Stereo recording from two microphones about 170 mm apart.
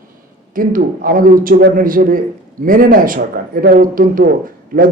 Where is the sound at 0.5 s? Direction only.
55° right (ahead or behind).